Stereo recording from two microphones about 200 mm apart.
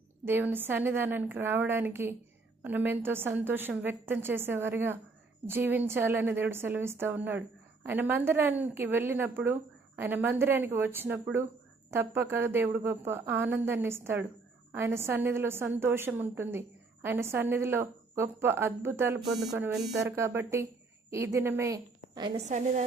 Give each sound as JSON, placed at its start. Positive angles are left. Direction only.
{"t": 0.3, "sound": "a woman's voice", "side_deg": -10}
{"t": 22.4, "sound": "a woman's voice", "side_deg": -35}